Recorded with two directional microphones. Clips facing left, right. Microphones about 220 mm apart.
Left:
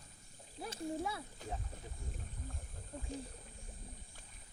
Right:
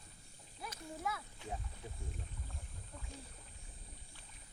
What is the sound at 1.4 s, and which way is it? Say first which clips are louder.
Speech: even; 40° left (ahead or behind).